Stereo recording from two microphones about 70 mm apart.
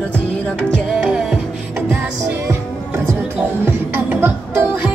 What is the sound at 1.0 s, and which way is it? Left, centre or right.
Music, centre.